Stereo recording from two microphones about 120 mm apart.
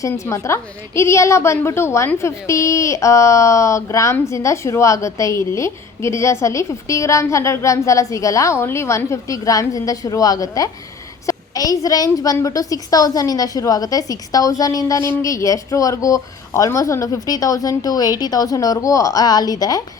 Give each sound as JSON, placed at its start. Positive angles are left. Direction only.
{"t": 0.0, "sound": "a woman's voice", "side_deg": 25}